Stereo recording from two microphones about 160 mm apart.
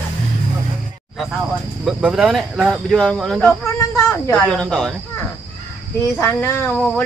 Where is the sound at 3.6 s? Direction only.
15° left (ahead or behind).